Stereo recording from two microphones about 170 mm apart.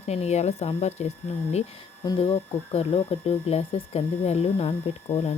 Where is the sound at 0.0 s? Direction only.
40° left (ahead or behind).